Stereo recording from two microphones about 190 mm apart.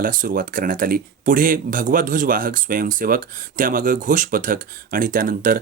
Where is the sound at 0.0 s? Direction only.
45° right (ahead or behind).